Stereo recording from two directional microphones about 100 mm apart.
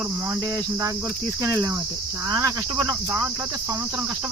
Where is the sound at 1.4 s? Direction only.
30° right (ahead or behind).